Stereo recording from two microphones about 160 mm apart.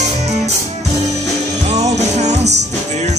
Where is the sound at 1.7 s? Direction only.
45° right (ahead or behind).